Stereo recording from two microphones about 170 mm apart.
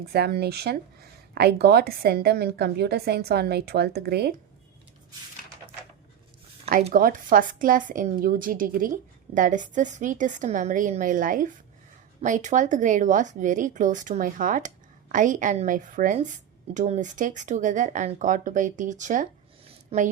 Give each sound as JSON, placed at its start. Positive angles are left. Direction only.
{"t": 0.0, "sound": "a woman's voice", "side_deg": -65}
{"t": 6.9, "sound": "a woman's voice", "side_deg": -55}